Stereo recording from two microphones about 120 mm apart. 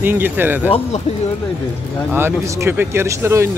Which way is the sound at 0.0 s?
15° right (ahead or behind).